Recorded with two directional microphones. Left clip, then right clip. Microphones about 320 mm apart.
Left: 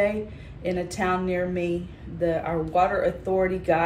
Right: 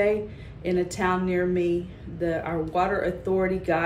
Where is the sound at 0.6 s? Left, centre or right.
Centre.